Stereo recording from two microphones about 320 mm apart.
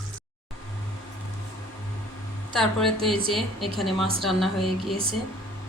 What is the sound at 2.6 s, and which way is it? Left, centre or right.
Speech, centre.